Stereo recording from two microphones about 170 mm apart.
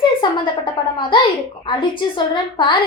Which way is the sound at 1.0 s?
25° left (ahead or behind).